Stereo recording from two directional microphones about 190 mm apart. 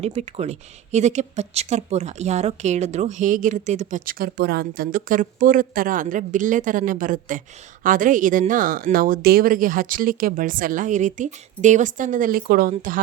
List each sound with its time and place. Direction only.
0.0 s a woman's voice: 35° right (ahead or behind)